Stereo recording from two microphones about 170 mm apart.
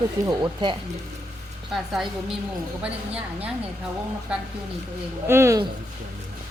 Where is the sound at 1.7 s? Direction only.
Centre (ahead or behind).